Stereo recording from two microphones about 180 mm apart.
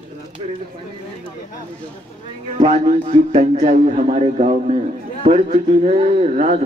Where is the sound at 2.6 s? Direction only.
40° right (ahead or behind).